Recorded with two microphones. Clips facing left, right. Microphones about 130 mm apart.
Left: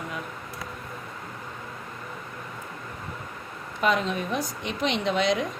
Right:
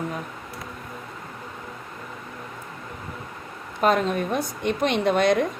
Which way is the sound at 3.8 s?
50° right (ahead or behind).